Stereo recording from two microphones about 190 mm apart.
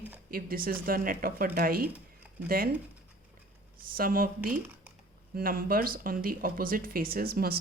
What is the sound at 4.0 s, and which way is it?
Speech, 50° right (ahead or behind).